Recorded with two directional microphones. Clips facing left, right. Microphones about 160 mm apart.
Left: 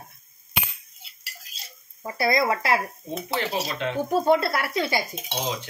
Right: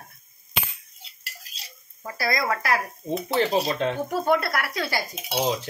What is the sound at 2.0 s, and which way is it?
Speech, 25° left (ahead or behind).